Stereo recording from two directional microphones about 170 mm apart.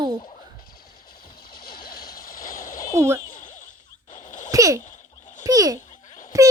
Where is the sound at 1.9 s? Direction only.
60° left (ahead or behind).